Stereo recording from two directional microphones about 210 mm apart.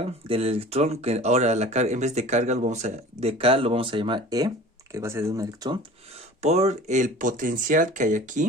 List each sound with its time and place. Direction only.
0.3 s speech: 30° right (ahead or behind)
6.4 s speech: 30° right (ahead or behind)